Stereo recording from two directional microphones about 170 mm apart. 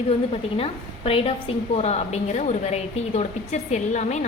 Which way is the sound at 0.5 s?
35° left (ahead or behind).